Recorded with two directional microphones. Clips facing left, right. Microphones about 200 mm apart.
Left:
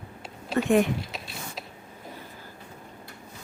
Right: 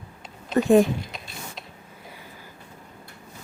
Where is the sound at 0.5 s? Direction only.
35° right (ahead or behind).